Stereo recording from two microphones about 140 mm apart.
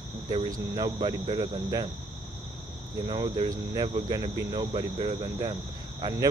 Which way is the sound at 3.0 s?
40° right (ahead or behind).